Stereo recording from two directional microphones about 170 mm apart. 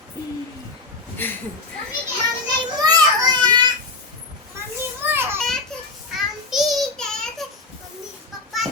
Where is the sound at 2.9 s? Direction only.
25° right (ahead or behind).